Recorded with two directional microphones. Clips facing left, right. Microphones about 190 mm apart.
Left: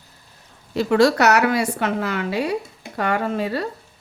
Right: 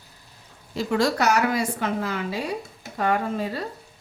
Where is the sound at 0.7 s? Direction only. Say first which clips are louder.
Left 6 dB; 70° left (ahead or behind).